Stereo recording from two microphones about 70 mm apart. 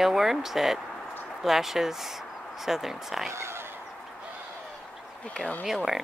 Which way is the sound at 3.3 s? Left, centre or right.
Right.